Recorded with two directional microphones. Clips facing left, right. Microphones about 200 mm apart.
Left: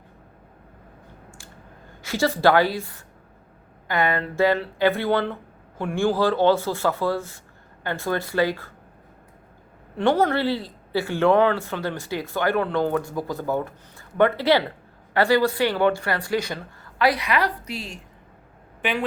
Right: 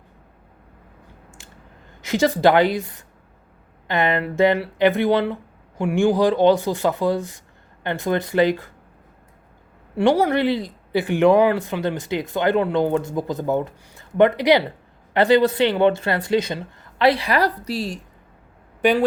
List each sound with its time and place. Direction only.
2.0 s speech: 20° right (ahead or behind)
9.9 s speech: 15° right (ahead or behind); by 19.0 s 40° right (ahead or behind)